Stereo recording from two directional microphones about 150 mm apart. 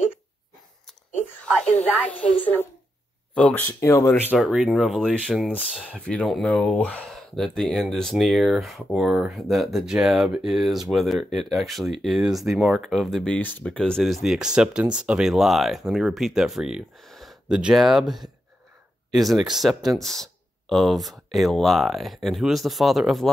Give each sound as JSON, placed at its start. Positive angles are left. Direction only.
{"t": 1.4, "sound": "a sound", "side_deg": 5}
{"t": 2.0, "sound": "speech", "side_deg": 10}
{"t": 4.4, "sound": "speech", "side_deg": 0}